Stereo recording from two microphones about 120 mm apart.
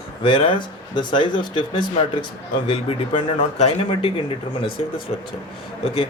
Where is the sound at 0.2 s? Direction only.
45° left (ahead or behind).